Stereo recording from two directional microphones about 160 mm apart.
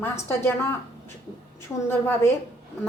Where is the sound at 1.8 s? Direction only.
15° left (ahead or behind).